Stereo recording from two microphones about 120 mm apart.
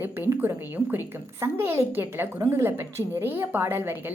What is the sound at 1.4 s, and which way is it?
A woman's voice, 20° right (ahead or behind).